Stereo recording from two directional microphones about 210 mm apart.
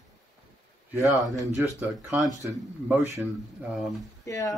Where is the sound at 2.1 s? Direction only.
5° right (ahead or behind).